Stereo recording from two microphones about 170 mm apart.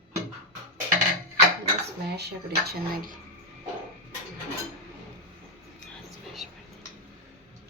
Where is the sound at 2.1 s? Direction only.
70° right (ahead or behind).